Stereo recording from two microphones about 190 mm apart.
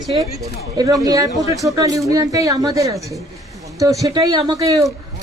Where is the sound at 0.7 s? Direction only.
20° right (ahead or behind).